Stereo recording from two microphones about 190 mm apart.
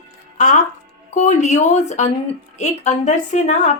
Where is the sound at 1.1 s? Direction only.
35° left (ahead or behind).